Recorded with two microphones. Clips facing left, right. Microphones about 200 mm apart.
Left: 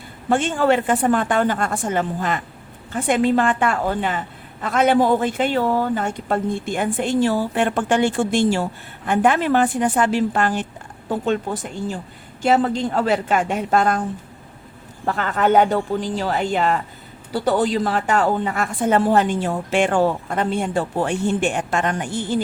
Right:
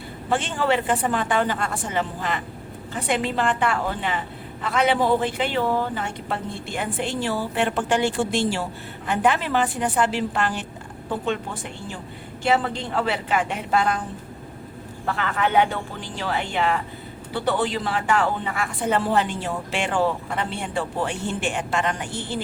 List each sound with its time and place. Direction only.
0.3 s a woman's voice: 50° left (ahead or behind)
15.0 s a woman's voice: 45° left (ahead or behind)